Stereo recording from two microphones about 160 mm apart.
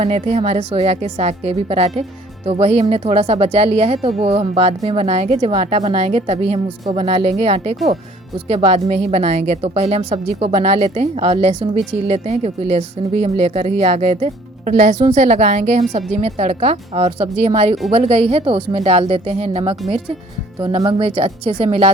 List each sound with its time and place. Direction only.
0.0 s a woman's voice: 40° right (ahead or behind)
21.0 s a woman's voice: 35° right (ahead or behind)